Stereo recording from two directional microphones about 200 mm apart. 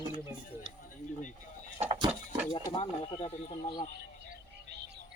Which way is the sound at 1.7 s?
30° right (ahead or behind).